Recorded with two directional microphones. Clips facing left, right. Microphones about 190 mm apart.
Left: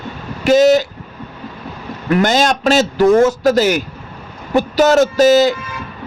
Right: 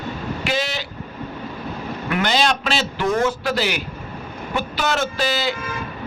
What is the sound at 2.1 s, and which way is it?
A man's voice, 40° left (ahead or behind).